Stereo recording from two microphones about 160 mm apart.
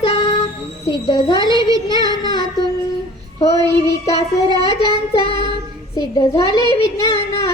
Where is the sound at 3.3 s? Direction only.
40° left (ahead or behind).